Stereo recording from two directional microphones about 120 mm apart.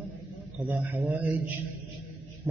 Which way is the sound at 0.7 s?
15° right (ahead or behind).